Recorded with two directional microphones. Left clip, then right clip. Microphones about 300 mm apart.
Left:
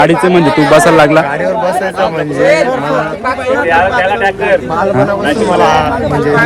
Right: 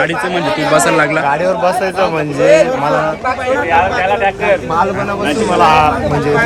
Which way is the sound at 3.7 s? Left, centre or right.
Left.